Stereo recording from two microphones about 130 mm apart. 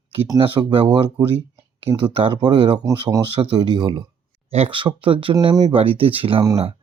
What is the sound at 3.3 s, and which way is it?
Speech, 45° right (ahead or behind).